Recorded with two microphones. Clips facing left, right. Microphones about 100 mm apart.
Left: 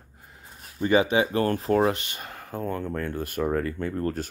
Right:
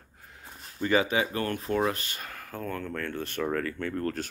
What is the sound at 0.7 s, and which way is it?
Speech, 20° left (ahead or behind).